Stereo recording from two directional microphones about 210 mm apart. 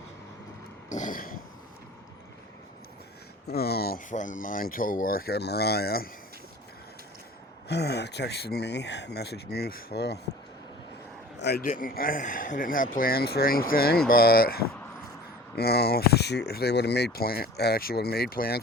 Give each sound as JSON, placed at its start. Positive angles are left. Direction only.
{"t": 0.9, "sound": "a sound", "side_deg": 35}
{"t": 3.4, "sound": "speech", "side_deg": 50}
{"t": 7.7, "sound": "speech", "side_deg": 50}
{"t": 11.3, "sound": "speech", "side_deg": 50}